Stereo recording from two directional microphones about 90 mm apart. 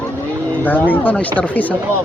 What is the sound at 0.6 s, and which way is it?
Speech, 20° left (ahead or behind).